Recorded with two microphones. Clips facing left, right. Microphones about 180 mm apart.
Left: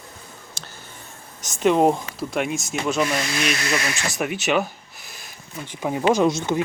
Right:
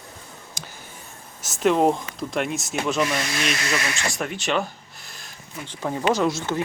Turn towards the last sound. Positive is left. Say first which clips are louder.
# left 3 dB
turn(degrees=20)  # may be behind; listen again after turning